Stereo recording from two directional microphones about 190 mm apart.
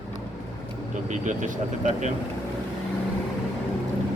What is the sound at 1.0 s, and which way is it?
Speech, 40° right (ahead or behind).